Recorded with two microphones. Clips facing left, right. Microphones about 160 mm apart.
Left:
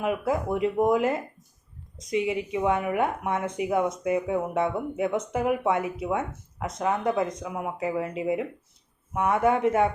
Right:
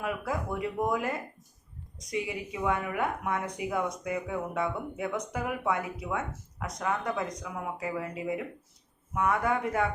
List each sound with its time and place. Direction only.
0.0 s speech: 20° left (ahead or behind)